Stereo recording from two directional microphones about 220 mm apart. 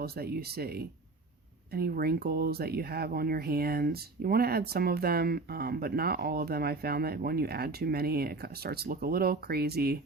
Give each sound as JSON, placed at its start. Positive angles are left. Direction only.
{"t": 0.0, "sound": "speech", "side_deg": -45}